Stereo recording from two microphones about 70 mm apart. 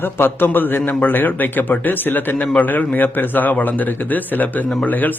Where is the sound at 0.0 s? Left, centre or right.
Left.